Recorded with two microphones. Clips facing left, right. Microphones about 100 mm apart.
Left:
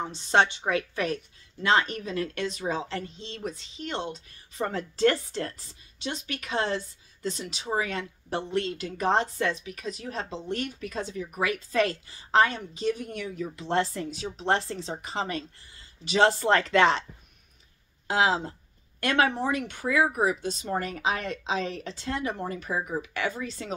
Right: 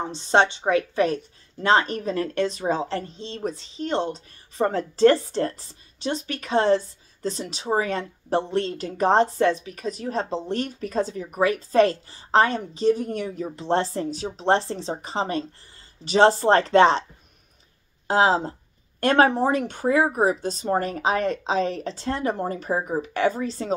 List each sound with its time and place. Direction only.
0.0 s a woman's voice: 30° right (ahead or behind)
18.0 s a woman's voice: 35° right (ahead or behind)